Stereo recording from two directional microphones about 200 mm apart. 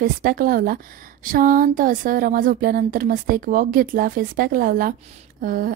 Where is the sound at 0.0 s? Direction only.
50° right (ahead or behind).